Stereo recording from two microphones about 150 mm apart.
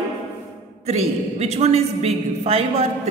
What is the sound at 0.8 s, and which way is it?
A woman's voice, 45° right (ahead or behind).